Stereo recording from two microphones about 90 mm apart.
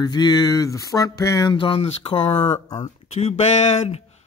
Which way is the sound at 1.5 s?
90° left.